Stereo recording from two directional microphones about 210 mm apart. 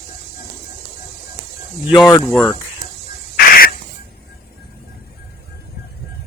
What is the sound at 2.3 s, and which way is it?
Speech, 5° left (ahead or behind).